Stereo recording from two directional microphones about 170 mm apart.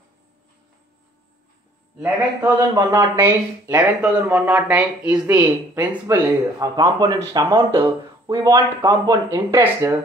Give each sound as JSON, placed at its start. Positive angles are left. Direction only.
{"t": 2.4, "sound": "speech", "side_deg": -20}